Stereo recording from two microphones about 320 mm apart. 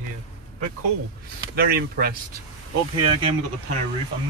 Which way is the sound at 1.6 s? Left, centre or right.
Right.